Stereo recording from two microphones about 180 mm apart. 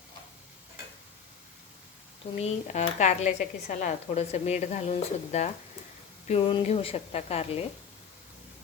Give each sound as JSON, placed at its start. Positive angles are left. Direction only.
{"t": 2.3, "sound": "speech", "side_deg": 40}